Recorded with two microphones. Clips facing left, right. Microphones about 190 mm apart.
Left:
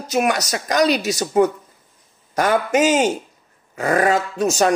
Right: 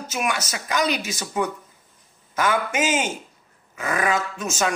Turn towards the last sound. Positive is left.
turn(degrees=35)  # may be behind; listen again after turning